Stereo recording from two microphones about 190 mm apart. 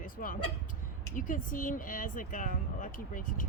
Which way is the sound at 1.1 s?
45° left (ahead or behind).